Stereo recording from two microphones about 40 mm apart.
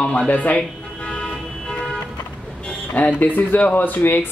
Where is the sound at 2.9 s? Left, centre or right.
Left.